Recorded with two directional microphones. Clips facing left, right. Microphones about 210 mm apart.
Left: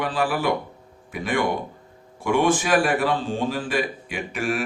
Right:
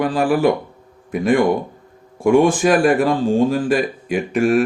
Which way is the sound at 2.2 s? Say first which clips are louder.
Right 8 dB; 40° right (ahead or behind).